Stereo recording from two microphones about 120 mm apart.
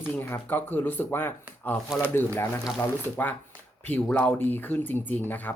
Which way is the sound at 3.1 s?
15° left (ahead or behind).